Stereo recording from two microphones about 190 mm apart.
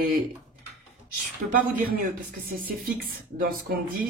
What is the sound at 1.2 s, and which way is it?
Speech, 50° right (ahead or behind).